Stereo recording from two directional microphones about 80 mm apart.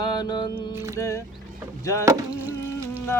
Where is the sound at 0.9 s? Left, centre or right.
Left.